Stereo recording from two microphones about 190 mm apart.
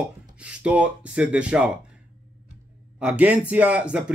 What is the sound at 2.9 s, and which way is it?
Speech, 5° right (ahead or behind).